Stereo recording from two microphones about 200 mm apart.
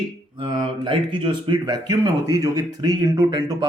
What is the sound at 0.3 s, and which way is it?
Speech, 25° right (ahead or behind).